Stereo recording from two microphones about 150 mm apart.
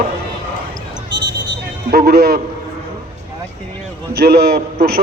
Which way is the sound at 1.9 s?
90° right.